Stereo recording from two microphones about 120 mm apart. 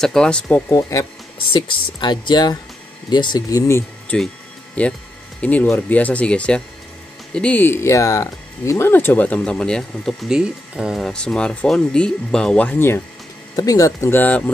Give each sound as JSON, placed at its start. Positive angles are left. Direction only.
{"t": 0.0, "sound": "speech", "side_deg": 5}
{"t": 0.7, "sound": "speech", "side_deg": 25}
{"t": 1.5, "sound": "speech", "side_deg": 40}
{"t": 4.1, "sound": "speech", "side_deg": 10}
{"t": 13.6, "sound": "speech", "side_deg": 30}